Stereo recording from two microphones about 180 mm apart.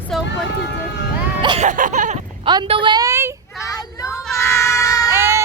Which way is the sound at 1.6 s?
45° right (ahead or behind).